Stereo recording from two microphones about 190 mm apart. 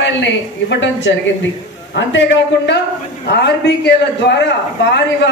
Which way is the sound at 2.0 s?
70° left (ahead or behind).